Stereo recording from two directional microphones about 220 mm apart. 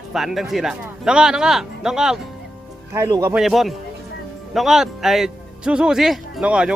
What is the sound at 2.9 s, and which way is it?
Speech, 15° right (ahead or behind).